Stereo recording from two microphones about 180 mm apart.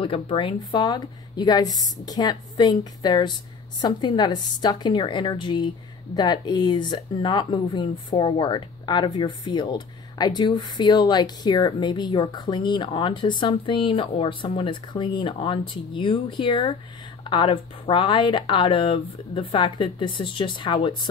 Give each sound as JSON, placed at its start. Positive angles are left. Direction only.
{"t": 0.0, "sound": "speech", "side_deg": 30}